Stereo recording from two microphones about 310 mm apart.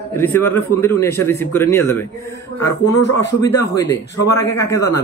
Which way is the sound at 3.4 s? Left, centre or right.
Centre.